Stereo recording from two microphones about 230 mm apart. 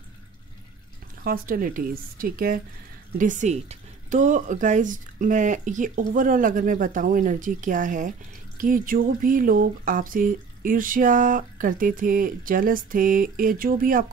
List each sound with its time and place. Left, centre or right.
1.2 s speech: right